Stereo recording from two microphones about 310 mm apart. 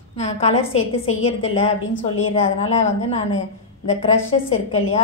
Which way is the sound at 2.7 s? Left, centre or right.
Left.